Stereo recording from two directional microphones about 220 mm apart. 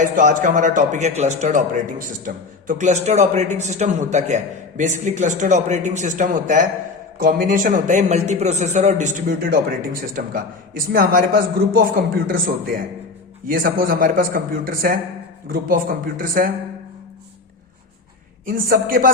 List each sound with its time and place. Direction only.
0.0 s a man's voice: 35° right (ahead or behind)
18.4 s a man's voice: 40° right (ahead or behind)